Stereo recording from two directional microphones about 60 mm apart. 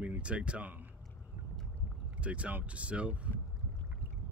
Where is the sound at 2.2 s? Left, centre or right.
Right.